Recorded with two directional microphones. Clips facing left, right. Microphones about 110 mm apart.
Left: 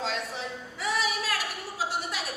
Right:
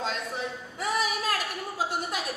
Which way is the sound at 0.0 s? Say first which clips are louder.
Right 1 dB; 45° right (ahead or behind).